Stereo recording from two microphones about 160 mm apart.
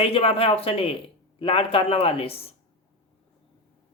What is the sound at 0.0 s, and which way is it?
Speech, 35° left (ahead or behind).